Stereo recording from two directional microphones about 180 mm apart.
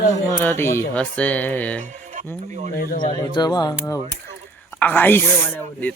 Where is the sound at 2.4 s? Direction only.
40° right (ahead or behind).